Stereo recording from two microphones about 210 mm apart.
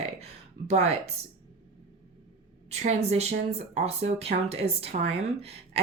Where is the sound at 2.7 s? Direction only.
30° right (ahead or behind).